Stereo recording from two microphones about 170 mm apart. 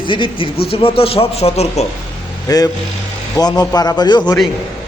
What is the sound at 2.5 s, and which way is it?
A man's voice, 20° left (ahead or behind).